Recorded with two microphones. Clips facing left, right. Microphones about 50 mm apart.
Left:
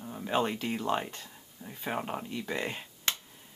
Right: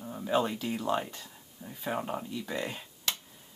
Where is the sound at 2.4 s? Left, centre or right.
Centre.